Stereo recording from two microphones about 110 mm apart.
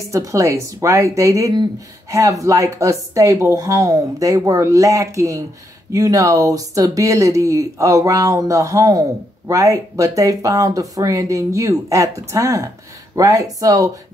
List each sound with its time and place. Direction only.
0.1 s speech: 30° right (ahead or behind)